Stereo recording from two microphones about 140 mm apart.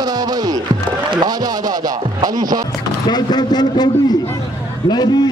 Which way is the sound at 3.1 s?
30° left (ahead or behind).